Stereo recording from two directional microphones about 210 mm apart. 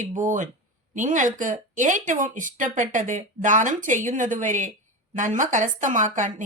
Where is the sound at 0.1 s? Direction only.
35° right (ahead or behind).